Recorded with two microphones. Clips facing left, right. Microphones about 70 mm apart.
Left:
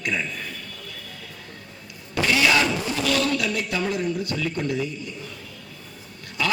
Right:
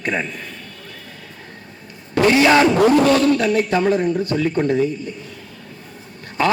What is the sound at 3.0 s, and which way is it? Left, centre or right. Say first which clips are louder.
A man's voice: right 8 dB; right.